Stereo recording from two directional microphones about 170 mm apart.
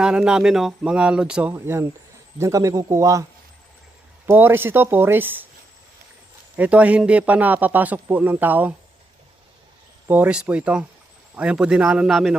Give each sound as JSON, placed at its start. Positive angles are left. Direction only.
{"t": 0.0, "sound": "speech", "side_deg": -5}
{"t": 4.3, "sound": "speech", "side_deg": -10}
{"t": 6.6, "sound": "speech", "side_deg": -10}
{"t": 10.1, "sound": "speech", "side_deg": -10}